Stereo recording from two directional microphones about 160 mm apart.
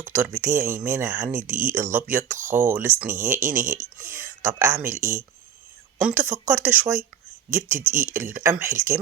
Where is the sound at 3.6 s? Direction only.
55° right (ahead or behind).